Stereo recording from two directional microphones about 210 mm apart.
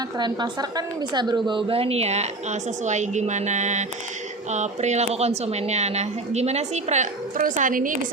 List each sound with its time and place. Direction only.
0.2 s a woman's voice: 20° right (ahead or behind); by 7.9 s 40° right (ahead or behind)